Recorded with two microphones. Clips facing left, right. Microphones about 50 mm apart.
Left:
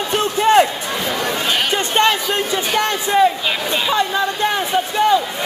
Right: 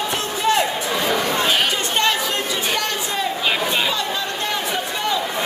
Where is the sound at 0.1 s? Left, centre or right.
Left.